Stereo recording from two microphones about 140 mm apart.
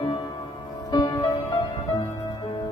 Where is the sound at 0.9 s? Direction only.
30° left (ahead or behind).